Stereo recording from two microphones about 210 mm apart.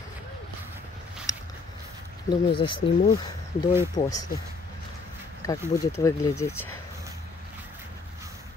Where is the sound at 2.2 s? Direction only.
20° left (ahead or behind).